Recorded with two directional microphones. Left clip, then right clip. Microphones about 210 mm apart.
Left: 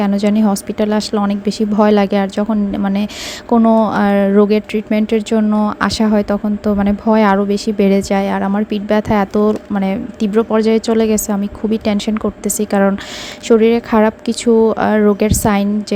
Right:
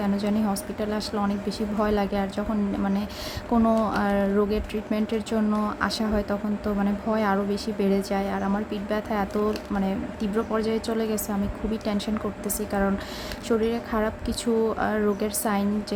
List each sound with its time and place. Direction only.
0.0 s speech: 35° left (ahead or behind)